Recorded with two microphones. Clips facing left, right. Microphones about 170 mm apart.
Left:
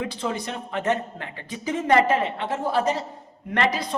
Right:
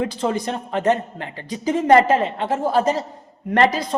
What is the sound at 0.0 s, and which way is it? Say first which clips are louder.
Speech: right 6 dB; 45° right (ahead or behind).